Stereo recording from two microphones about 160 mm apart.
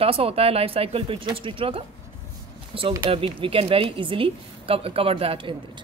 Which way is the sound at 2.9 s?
30° right (ahead or behind).